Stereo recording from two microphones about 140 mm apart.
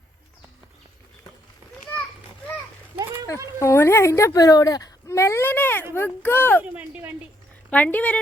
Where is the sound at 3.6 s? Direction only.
20° left (ahead or behind).